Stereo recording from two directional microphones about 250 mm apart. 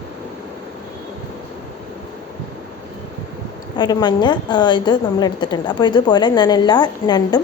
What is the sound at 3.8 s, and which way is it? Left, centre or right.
A woman's voice, centre.